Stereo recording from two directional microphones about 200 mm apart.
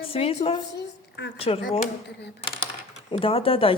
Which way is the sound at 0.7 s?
60° left (ahead or behind).